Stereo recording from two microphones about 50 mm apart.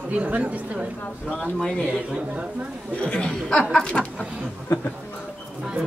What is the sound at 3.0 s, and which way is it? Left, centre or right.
Speech, left.